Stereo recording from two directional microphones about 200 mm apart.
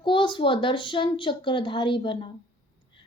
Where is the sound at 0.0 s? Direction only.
25° left (ahead or behind).